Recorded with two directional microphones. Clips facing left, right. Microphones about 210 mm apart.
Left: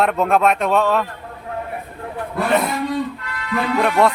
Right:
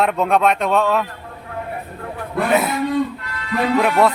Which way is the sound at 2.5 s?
5° right (ahead or behind).